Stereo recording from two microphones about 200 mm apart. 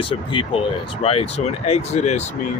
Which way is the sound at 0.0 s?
25° left (ahead or behind).